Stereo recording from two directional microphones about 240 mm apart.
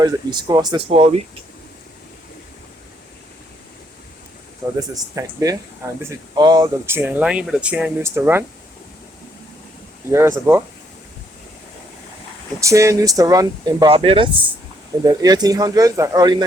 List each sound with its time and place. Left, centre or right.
0.0 s speech: centre
4.9 s speech: centre
10.1 s speech: centre
12.5 s speech: centre